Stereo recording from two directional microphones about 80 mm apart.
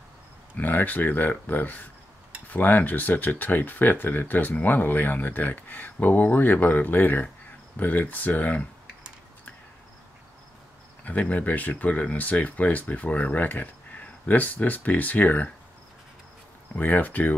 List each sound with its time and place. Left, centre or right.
0.6 s speech: left
11.1 s speech: centre
16.7 s speech: left